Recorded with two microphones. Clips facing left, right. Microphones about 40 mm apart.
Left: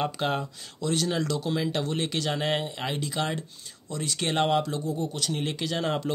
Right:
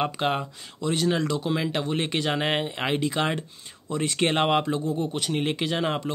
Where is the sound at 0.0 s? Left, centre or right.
Right.